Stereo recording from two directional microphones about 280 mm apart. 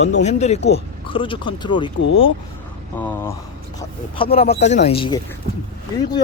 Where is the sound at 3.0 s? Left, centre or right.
Centre.